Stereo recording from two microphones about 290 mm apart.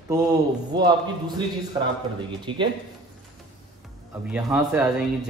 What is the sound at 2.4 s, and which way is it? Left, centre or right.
Speech, centre.